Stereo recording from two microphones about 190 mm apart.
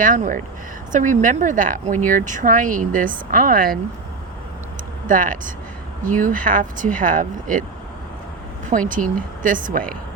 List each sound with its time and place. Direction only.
0.0 s speech: 45° right (ahead or behind)
5.0 s speech: 45° right (ahead or behind)
8.9 s speech: 45° right (ahead or behind)